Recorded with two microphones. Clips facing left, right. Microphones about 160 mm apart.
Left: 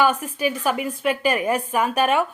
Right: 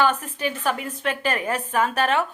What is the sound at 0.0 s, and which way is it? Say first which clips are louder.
A woman's voice: left 2 dB; 10° left (ahead or behind).